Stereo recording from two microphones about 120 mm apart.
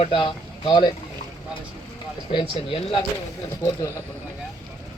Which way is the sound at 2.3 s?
45° left (ahead or behind).